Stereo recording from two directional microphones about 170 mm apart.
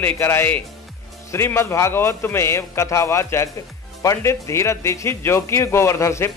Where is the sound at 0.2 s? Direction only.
15° left (ahead or behind).